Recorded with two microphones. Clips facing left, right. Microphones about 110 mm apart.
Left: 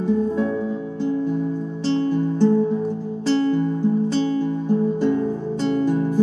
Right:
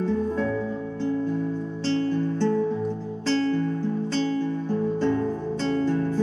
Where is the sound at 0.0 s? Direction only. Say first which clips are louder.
Left 4 dB; 15° left (ahead or behind).